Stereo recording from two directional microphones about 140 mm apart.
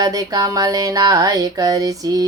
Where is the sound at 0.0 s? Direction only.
25° right (ahead or behind).